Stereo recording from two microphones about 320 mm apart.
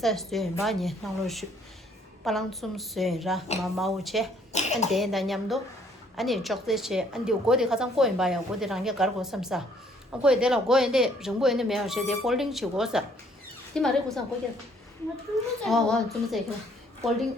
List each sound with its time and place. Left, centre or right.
0.0 s a woman's voice: centre
4.5 s cough: left
4.9 s a woman's voice: centre
15.6 s a woman's voice: centre